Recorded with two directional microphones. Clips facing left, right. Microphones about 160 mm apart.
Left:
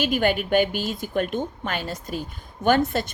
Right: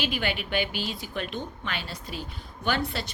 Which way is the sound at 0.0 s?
45° left (ahead or behind).